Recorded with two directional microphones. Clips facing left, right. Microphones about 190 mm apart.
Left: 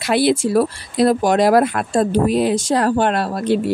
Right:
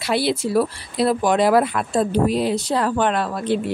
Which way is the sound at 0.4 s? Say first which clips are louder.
Left 3 dB; 45° left (ahead or behind).